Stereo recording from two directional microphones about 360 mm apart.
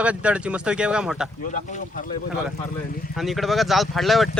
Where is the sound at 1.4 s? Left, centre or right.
Left.